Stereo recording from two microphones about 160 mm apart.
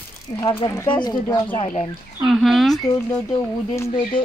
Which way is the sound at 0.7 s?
25° left (ahead or behind).